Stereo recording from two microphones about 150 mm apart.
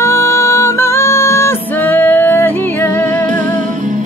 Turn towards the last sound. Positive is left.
turn(degrees=15)  # may be behind; listen again after turning